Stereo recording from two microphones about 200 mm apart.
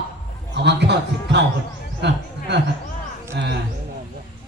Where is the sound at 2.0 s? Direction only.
60° right (ahead or behind).